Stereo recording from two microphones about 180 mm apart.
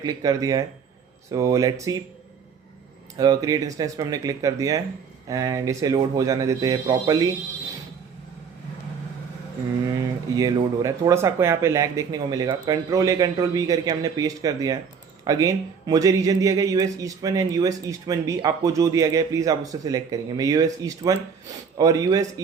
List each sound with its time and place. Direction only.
0.0 s speech: 20° right (ahead or behind)
3.2 s speech: 20° right (ahead or behind)
10.3 s speech: 20° right (ahead or behind)